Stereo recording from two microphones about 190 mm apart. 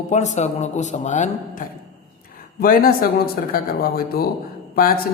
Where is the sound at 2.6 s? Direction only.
50° left (ahead or behind).